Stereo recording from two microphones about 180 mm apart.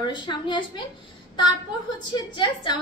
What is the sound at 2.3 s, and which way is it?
Speech, 25° left (ahead or behind).